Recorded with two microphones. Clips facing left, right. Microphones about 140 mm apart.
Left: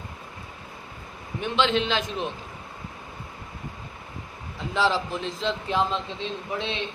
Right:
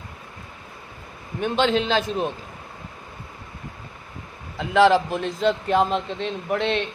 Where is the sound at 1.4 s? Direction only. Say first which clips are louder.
Right 3 dB; 45° right (ahead or behind).